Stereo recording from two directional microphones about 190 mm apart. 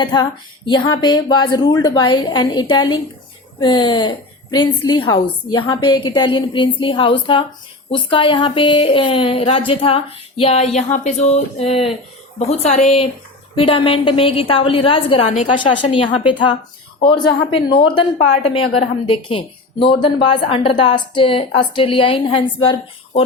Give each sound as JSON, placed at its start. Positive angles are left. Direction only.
{"t": 0.0, "sound": "a woman's voice", "side_deg": 25}